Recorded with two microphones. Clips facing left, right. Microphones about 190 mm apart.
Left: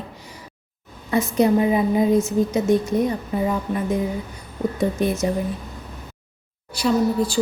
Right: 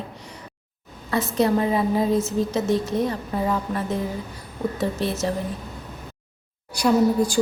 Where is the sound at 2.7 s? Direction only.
25° right (ahead or behind).